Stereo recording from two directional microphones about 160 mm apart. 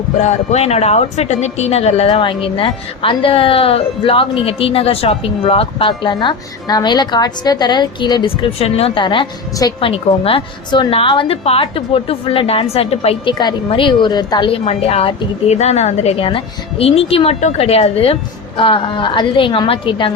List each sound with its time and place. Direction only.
0.2 s speech: 45° left (ahead or behind); by 14.6 s 25° left (ahead or behind)
14.6 s speech: 40° left (ahead or behind)